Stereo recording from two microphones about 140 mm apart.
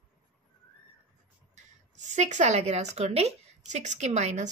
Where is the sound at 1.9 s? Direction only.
55° right (ahead or behind).